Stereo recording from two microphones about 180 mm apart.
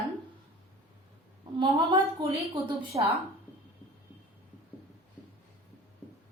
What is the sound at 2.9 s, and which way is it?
Speech, 30° right (ahead or behind).